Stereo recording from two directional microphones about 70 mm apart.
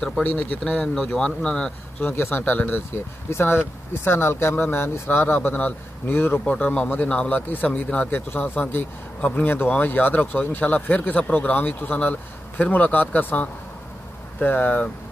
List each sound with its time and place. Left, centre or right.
0.2 s speech: left
1.1 s speech: centre
2.0 s speech: left
6.4 s speech: centre